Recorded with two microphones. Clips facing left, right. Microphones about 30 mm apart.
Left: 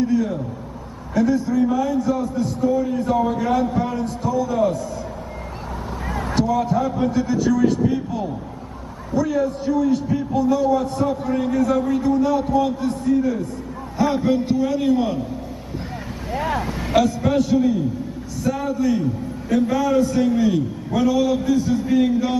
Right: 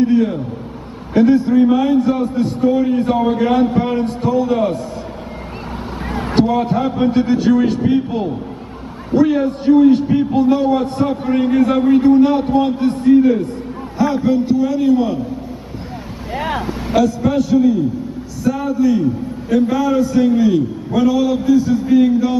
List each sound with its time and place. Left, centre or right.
0.0 s a man's voice: right
6.1 s a man's voice: right
13.9 s a man's voice: centre
16.3 s vehicle: right
16.6 s a man's voice: centre